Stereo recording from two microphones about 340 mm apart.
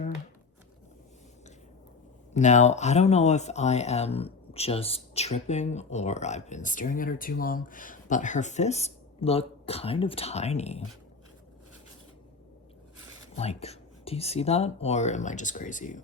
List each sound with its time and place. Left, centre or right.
2.3 s speech: left
13.3 s speech: centre